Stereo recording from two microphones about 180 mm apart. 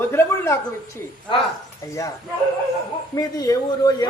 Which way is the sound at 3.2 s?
20° left (ahead or behind).